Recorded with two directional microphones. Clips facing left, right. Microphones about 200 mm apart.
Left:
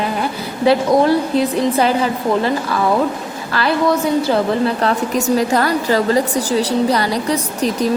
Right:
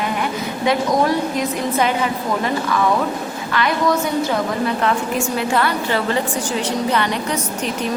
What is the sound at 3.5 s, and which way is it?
A woman's voice, 30° left (ahead or behind).